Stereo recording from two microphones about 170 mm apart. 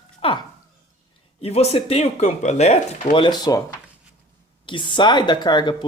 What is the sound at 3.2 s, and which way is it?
Speech, 25° left (ahead or behind).